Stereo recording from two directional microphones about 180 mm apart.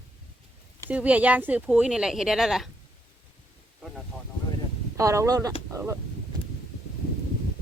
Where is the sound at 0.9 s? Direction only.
5° right (ahead or behind).